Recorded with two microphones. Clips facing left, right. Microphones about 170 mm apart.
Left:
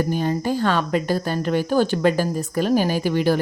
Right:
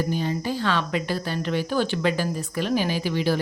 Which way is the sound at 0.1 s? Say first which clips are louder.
Left 4 dB; 50° left (ahead or behind).